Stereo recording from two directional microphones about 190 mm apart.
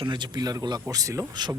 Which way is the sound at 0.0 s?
20° right (ahead or behind).